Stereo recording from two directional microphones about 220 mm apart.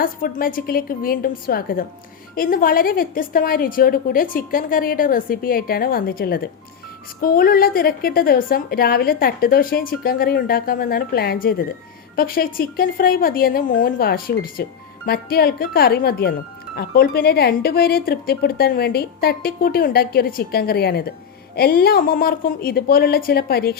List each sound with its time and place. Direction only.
0.0 s a woman's voice: 40° left (ahead or behind)